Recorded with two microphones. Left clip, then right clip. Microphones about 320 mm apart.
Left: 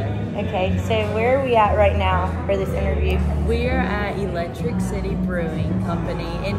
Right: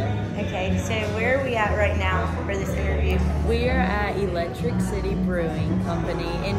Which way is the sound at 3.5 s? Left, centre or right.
Centre.